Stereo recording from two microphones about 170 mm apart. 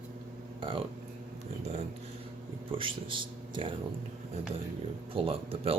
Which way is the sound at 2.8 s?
30° right (ahead or behind).